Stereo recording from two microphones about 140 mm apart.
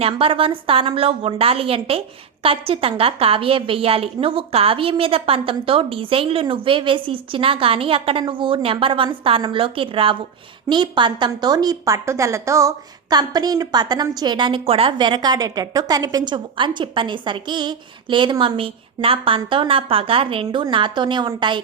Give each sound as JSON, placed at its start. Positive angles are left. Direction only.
{"t": 0.0, "sound": "a woman's voice", "side_deg": -40}